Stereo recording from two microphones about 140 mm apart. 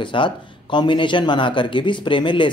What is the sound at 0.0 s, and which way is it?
Speech, 35° left (ahead or behind).